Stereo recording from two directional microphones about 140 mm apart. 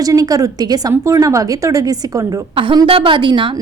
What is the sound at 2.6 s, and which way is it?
Speech, 35° right (ahead or behind).